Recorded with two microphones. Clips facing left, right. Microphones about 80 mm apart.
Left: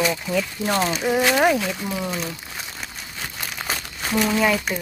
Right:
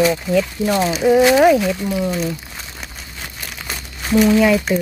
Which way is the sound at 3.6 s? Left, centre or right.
Centre.